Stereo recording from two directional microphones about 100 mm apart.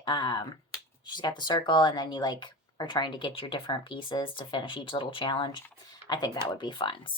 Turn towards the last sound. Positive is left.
turn(degrees=55)  # may be behind; listen again after turning